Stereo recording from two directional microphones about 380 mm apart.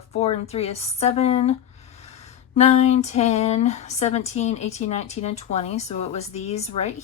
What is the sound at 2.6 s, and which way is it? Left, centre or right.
Speech, centre.